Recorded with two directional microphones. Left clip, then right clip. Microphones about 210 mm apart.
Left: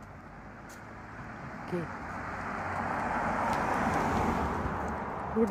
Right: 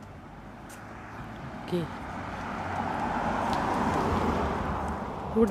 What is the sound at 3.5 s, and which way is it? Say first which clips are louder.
Vehicle: right 2 dB; 25° left (ahead or behind).